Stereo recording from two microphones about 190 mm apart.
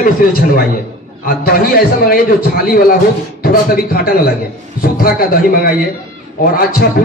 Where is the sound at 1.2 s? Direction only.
50° left (ahead or behind).